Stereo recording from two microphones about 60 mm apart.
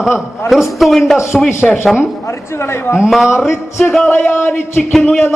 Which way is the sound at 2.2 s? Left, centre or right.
Left.